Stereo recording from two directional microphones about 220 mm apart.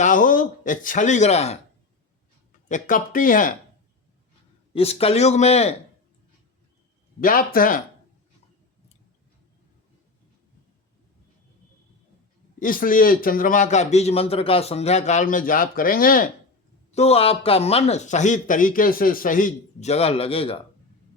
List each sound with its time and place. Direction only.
0.0 s speech: 35° left (ahead or behind)
2.6 s a man's voice: 35° left (ahead or behind)
4.7 s speech: 25° left (ahead or behind)
7.2 s a man's voice: 40° left (ahead or behind)
12.5 s a man's voice: 40° left (ahead or behind)
16.9 s a man's voice: 30° left (ahead or behind)